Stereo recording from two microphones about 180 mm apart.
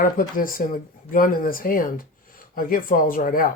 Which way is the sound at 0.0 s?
50° left (ahead or behind).